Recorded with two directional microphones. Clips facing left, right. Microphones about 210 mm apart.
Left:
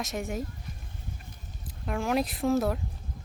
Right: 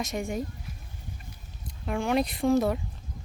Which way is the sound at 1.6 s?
Centre (ahead or behind).